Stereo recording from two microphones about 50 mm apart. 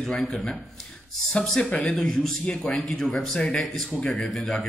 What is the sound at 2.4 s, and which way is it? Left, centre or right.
Speech, left.